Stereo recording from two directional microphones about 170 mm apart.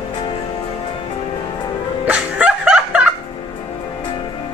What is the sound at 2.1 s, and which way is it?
Music, 10° right (ahead or behind).